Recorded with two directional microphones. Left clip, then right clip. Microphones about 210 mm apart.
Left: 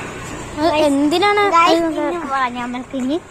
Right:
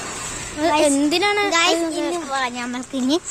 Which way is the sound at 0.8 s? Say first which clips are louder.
Left 3 dB; 20° right (ahead or behind).